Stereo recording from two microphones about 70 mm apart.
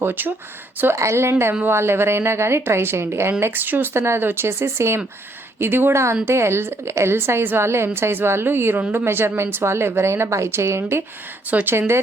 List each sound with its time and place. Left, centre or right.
0.0 s speech: right
0.9 s a woman's voice: right
11.5 s speech: right